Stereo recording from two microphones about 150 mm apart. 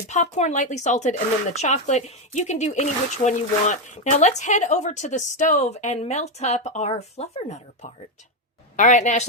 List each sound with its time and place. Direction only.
0.1 s speech: 50° left (ahead or behind)
8.7 s a woman's voice: 55° left (ahead or behind)